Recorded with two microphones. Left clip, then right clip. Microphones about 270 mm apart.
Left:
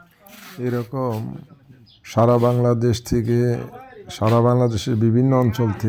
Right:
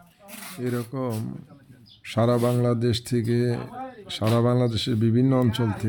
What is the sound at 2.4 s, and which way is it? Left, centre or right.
Speech, centre.